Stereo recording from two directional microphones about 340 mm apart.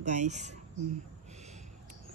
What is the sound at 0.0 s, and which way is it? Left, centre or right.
Speech, right.